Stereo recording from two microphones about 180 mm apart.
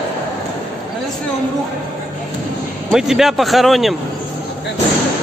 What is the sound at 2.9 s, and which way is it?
A man's voice, centre (ahead or behind).